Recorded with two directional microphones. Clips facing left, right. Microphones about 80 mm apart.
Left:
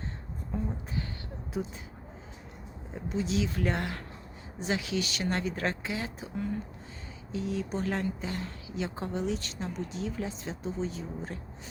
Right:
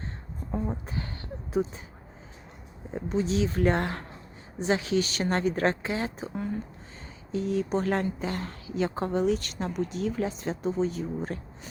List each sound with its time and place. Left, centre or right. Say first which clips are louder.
0.5 s a woman's voice: right 3 dB; right
2.9 s a woman's voice: right 4 dB; right